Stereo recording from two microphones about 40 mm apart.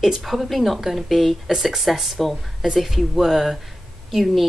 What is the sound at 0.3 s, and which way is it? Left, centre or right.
Speech, centre.